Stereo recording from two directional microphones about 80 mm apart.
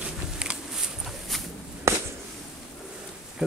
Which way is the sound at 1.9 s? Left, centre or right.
Right.